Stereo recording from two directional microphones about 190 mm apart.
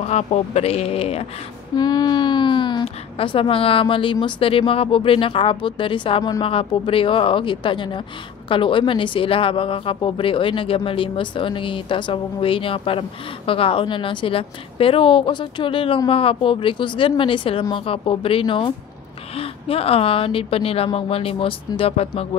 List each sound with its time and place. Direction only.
0.0 s speech: 35° left (ahead or behind)
1.8 s a woman's voice: 20° left (ahead or behind)